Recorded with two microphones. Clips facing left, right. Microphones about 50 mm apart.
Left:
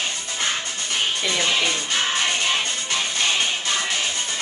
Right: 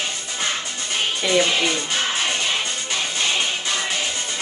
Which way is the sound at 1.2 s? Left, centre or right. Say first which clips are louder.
Right 5 dB; right.